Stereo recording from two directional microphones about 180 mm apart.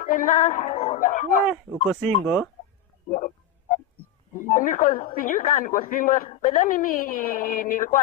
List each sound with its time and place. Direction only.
0.0 s a woman's voice: 50° left (ahead or behind)
1.5 s speech: 5° left (ahead or behind)
3.1 s a sound: 45° left (ahead or behind)
4.5 s a woman's voice: 50° left (ahead or behind)